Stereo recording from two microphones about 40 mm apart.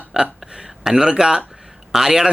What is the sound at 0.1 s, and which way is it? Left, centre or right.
Speech, centre.